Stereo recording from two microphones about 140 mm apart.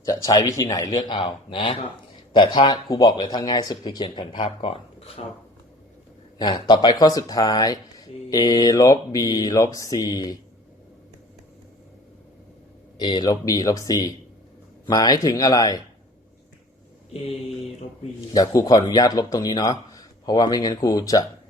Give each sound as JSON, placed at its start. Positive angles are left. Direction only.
{"t": 0.0, "sound": "speech", "side_deg": 25}
{"t": 6.4, "sound": "speech", "side_deg": 30}
{"t": 13.0, "sound": "speech", "side_deg": 30}
{"t": 18.3, "sound": "speech", "side_deg": 25}